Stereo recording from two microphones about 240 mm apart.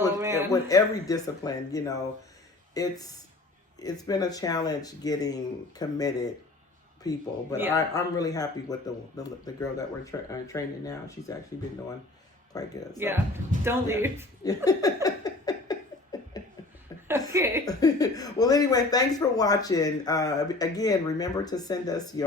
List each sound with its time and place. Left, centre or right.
0.2 s a sound: centre
0.5 s speech: centre
12.5 s speech: centre
13.0 s speech: centre
14.4 s speech: centre
15.0 s a sound: centre
16.4 s chuckle: centre
17.1 s a woman's voice: centre
17.7 s speech: centre